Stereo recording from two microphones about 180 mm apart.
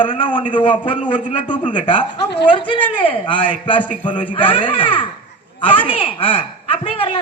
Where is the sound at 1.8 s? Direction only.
30° left (ahead or behind).